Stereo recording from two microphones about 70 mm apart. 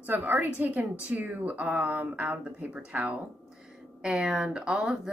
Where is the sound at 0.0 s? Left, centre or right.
Right.